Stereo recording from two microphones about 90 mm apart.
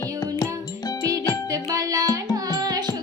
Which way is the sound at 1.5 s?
40° right (ahead or behind).